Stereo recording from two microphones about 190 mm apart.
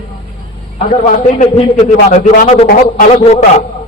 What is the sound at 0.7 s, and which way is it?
A man's voice, 40° left (ahead or behind).